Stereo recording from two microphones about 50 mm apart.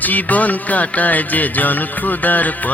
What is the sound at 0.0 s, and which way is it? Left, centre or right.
Music, left.